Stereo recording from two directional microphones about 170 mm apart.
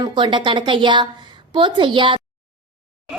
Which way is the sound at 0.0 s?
30° right (ahead or behind).